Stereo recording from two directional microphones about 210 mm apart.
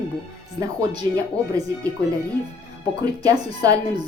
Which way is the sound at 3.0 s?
20° right (ahead or behind).